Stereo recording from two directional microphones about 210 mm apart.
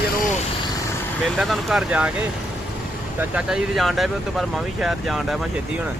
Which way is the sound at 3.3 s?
Centre (ahead or behind).